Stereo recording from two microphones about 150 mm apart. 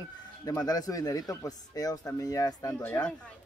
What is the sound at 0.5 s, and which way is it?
Speech, 25° left (ahead or behind).